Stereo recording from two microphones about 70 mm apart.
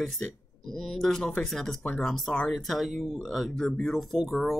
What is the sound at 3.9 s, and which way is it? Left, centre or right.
Speech, centre.